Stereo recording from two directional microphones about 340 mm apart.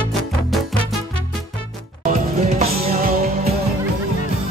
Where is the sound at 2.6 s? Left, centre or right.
Centre.